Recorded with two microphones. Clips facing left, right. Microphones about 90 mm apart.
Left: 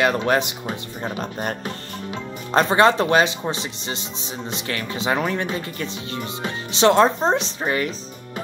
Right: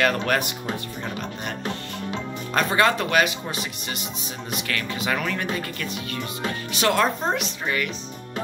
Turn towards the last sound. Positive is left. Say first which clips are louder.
# left 3 dB
turn(degrees=30)  # may be behind; listen again after turning